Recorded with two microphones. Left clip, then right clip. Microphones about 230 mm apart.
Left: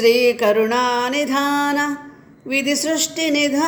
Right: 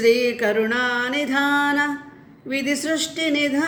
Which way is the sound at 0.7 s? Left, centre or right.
Centre.